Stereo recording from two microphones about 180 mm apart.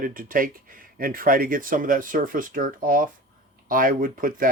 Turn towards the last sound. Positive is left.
turn(degrees=-50)  # may be behind; listen again after turning